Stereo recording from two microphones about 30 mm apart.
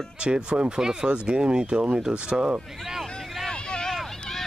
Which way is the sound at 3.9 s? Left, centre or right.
Centre.